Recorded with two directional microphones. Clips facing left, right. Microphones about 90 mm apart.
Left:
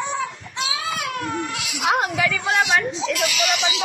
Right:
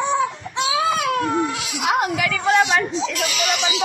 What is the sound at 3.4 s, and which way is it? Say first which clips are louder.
Speech: right 1 dB; 30° right (ahead or behind).